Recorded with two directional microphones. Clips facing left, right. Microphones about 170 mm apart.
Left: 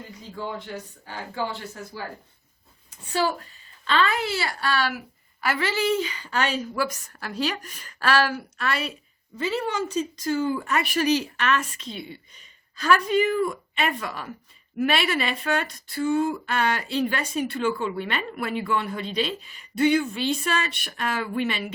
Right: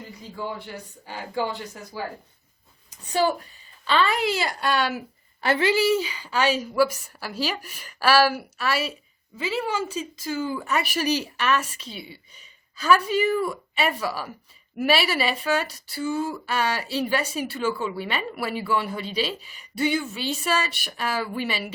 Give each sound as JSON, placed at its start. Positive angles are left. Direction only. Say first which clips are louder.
{"t": 3.1, "sound": "speech", "louder": "right 2 dB", "side_deg": -20}